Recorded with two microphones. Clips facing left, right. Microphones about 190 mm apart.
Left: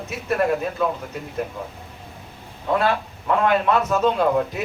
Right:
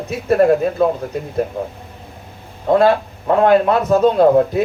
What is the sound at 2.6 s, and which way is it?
A man's voice, 35° right (ahead or behind).